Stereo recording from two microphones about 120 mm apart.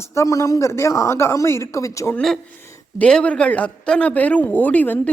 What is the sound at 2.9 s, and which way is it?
Speech, 10° left (ahead or behind).